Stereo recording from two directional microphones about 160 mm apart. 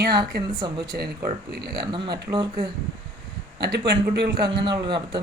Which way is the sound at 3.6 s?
90° right.